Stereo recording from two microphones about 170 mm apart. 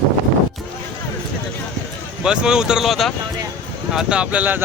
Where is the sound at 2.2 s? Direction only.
5° right (ahead or behind).